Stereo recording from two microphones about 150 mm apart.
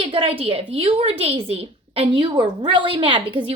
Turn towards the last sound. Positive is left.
turn(degrees=-35)  # may be behind; listen again after turning